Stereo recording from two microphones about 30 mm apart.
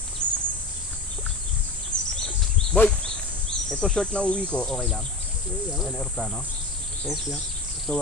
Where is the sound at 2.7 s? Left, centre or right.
Left.